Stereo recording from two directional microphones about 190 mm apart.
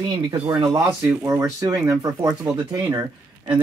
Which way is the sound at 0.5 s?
15° right (ahead or behind).